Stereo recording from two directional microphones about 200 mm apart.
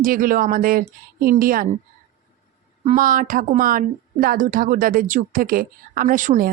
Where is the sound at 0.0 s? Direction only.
45° right (ahead or behind).